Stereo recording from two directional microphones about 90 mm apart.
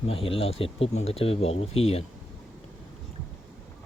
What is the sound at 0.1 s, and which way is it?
Speech, 90° left.